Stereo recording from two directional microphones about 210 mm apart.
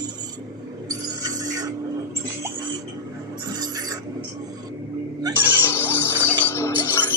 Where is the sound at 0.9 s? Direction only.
15° right (ahead or behind).